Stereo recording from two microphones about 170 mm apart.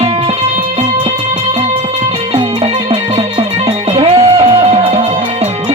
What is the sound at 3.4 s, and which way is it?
Music, 35° right (ahead or behind).